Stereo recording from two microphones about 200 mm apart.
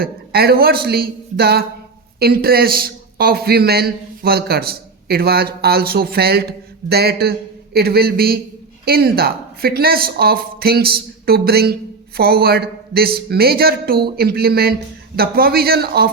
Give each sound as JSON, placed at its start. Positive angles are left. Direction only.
{"t": 0.0, "sound": "speech", "side_deg": -50}